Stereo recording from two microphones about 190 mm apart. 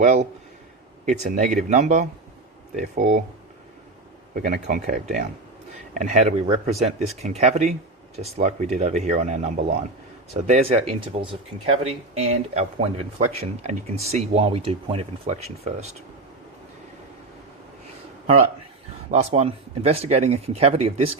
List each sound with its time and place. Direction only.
0.0 s speech: 40° right (ahead or behind)
4.4 s speech: 55° right (ahead or behind); by 15.9 s 35° right (ahead or behind)
19.1 s speech: 35° right (ahead or behind)